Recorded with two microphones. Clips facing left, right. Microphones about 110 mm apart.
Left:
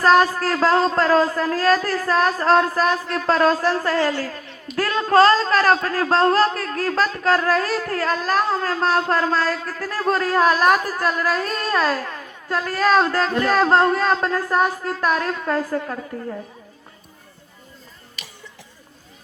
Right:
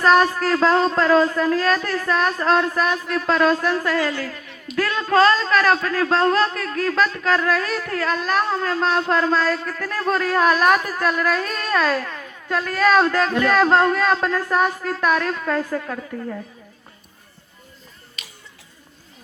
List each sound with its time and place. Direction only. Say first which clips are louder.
0.0 s a man's voice: even; 35° left (ahead or behind)